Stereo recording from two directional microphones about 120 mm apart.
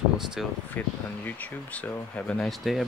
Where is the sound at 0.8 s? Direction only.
15° left (ahead or behind).